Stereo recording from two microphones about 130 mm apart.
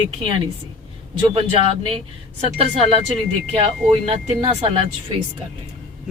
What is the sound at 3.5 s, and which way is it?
Speech, 50° right (ahead or behind).